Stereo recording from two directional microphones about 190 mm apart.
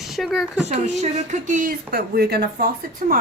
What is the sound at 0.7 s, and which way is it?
A woman's voice, 40° right (ahead or behind).